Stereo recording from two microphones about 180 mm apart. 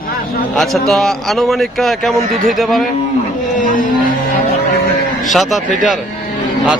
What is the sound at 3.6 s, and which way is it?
Speech, 50° left (ahead or behind).